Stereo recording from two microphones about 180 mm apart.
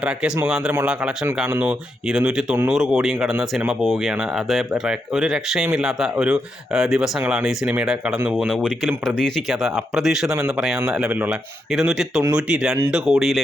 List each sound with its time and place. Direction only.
0.0 s speech: 5° right (ahead or behind)